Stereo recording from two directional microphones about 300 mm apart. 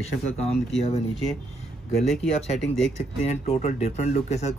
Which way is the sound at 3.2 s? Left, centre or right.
Left.